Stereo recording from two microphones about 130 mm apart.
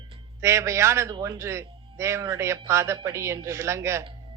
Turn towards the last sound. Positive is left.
turn(degrees=-20)  # may be behind; listen again after turning